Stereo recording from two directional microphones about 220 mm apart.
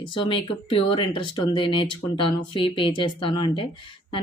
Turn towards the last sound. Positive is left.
turn(degrees=20)  # may be behind; listen again after turning